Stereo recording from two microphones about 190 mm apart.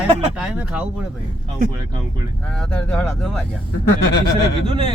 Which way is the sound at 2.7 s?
5° left (ahead or behind).